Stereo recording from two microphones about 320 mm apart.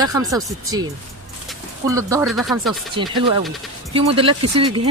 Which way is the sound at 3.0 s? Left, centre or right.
Centre.